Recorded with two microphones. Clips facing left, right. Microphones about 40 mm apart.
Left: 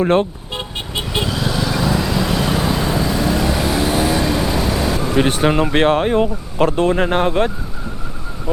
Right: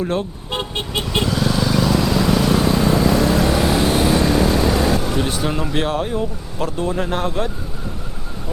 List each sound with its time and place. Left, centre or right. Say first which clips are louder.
0.0 s speech: left 7 dB; left
0.9 s vehicle: right 1 dB; centre
5.1 s speech: left 6 dB; left